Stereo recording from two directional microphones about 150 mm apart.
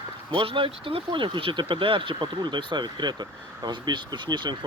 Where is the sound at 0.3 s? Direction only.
35° right (ahead or behind).